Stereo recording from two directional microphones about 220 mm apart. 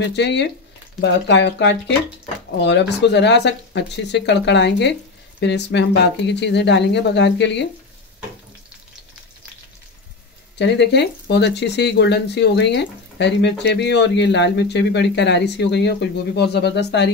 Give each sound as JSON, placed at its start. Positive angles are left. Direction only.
{"t": 0.0, "sound": "speech", "side_deg": 50}
{"t": 10.6, "sound": "speech", "side_deg": 50}